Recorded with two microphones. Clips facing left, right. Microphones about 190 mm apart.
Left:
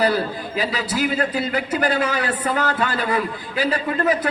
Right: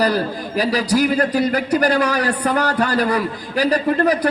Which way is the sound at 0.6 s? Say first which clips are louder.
Right 6 dB; 40° right (ahead or behind).